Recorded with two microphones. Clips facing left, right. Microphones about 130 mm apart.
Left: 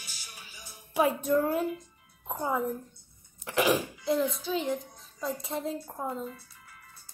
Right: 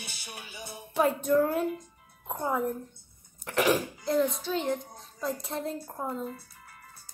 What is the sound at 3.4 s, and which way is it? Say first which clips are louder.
Cough: even; centre (ahead or behind).